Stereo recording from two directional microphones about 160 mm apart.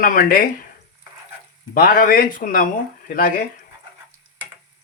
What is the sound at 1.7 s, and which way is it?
Speech, 60° left (ahead or behind).